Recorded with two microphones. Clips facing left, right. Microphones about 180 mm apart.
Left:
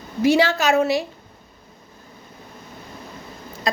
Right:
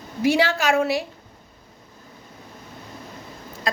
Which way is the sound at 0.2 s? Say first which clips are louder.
Left 3 dB; 10° right (ahead or behind).